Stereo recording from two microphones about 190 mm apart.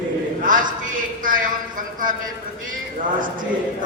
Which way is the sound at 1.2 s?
45° right (ahead or behind).